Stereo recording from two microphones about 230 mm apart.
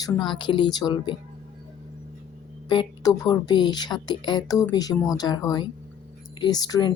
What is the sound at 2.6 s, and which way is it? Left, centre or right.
Speech, centre.